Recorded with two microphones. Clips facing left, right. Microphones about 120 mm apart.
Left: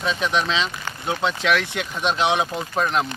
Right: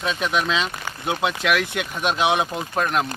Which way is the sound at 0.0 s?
Centre (ahead or behind).